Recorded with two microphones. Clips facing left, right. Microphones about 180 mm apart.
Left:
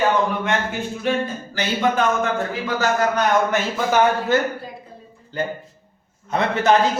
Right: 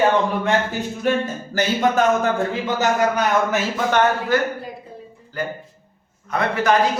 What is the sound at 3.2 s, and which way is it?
Speech, centre (ahead or behind).